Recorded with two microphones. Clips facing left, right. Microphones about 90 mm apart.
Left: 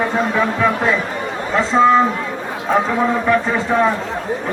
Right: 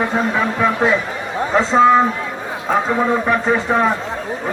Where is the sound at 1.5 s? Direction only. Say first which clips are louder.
Right 1 dB; 20° right (ahead or behind).